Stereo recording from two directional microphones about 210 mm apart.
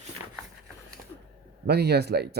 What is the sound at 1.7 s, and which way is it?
Speech, 50° right (ahead or behind).